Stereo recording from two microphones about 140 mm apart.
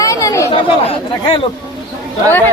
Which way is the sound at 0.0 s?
25° left (ahead or behind).